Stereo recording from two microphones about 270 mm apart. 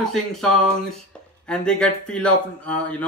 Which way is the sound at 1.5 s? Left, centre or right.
Centre.